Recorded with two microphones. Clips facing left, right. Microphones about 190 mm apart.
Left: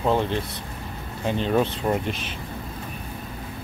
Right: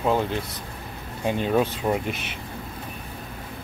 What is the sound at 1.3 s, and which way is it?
Speech, 10° right (ahead or behind).